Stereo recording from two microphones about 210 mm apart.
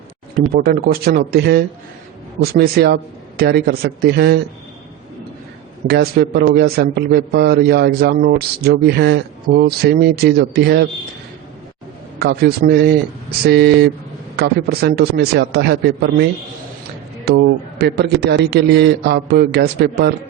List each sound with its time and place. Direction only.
0.5 s a man's voice: 45° right (ahead or behind)
5.9 s a man's voice: 50° right (ahead or behind)
12.2 s a man's voice: 50° right (ahead or behind)
17.2 s a man's voice: 50° right (ahead or behind)